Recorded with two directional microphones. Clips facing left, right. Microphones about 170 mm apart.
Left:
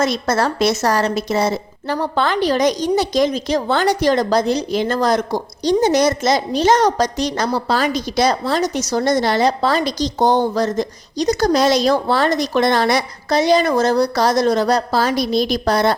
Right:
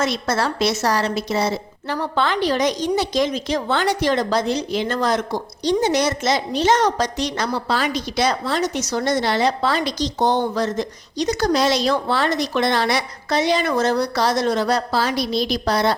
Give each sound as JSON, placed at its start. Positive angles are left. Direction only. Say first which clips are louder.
{"t": 0.0, "sound": "a woman's voice", "louder": "left 3 dB", "side_deg": 40}